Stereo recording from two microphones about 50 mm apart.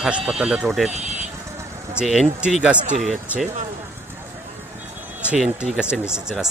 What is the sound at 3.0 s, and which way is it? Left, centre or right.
Speech, centre.